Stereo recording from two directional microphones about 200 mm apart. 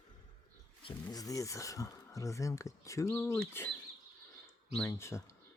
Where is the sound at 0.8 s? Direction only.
20° left (ahead or behind).